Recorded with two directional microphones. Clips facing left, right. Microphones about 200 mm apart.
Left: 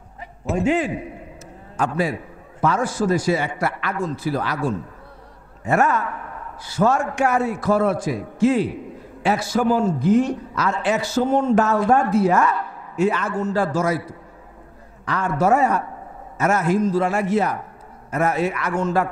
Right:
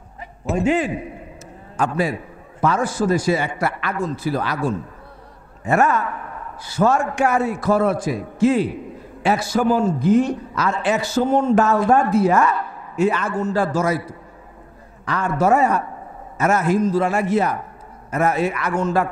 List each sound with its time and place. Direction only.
0.7 s a man's voice: 15° right (ahead or behind)
15.0 s a man's voice: 20° right (ahead or behind)